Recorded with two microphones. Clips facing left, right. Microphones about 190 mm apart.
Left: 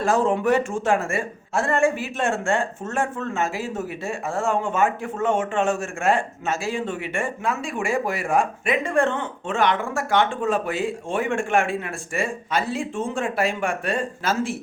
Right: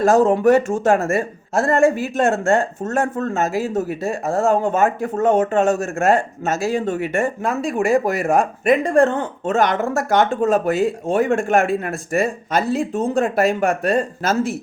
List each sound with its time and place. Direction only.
0.0 s speech: 40° right (ahead or behind)